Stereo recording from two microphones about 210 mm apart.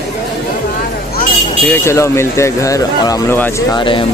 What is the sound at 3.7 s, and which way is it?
Speech, 25° left (ahead or behind).